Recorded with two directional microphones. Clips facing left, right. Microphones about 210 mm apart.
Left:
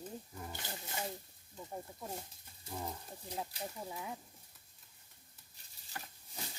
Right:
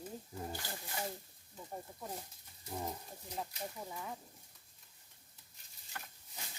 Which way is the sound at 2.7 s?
15° right (ahead or behind).